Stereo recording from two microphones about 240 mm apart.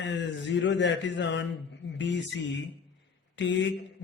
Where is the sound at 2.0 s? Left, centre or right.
Left.